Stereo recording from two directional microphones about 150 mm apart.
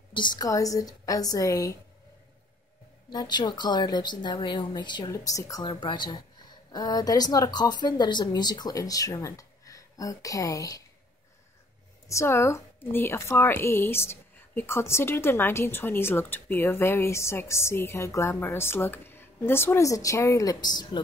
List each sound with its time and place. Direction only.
0.1 s a woman's voice: 25° left (ahead or behind)
3.1 s a woman's voice: 30° left (ahead or behind)
12.1 s speech: 20° left (ahead or behind)